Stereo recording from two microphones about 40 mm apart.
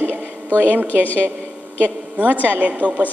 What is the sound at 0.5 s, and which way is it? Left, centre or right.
Speech, right.